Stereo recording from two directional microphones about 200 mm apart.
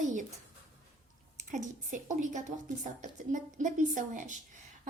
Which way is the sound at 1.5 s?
40° right (ahead or behind).